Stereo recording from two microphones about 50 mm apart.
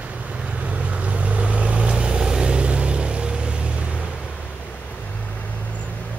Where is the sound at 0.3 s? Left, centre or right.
Right.